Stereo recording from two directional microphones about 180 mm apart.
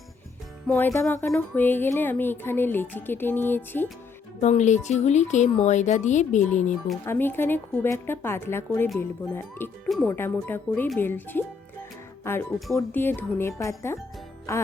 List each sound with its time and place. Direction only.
0.7 s a woman's voice: 15° left (ahead or behind)
4.4 s speech: 40° left (ahead or behind)
7.0 s a woman's voice: 15° left (ahead or behind)